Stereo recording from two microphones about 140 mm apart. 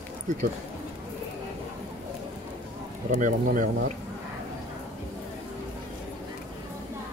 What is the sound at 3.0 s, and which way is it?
Speech, 70° right (ahead or behind).